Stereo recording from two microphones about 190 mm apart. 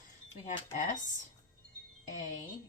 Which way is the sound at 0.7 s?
40° left (ahead or behind).